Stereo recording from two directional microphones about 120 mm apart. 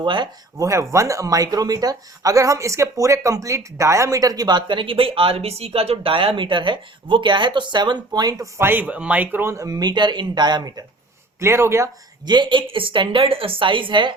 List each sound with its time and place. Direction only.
0.0 s speech: 40° right (ahead or behind)
0.6 s speech: 25° right (ahead or behind)
11.3 s speech: 20° right (ahead or behind)
12.2 s a woman's voice: 40° right (ahead or behind)